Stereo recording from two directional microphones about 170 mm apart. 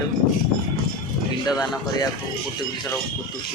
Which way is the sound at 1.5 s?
20° left (ahead or behind).